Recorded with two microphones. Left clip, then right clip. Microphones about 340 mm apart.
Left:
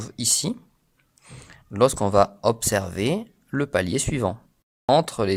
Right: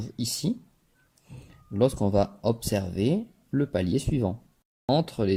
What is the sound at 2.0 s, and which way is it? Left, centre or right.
Speech, left.